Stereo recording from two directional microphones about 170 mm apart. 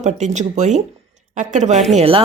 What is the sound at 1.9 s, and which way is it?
Speech, 35° right (ahead or behind).